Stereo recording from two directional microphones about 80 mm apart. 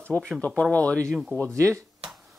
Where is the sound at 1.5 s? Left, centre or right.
Right.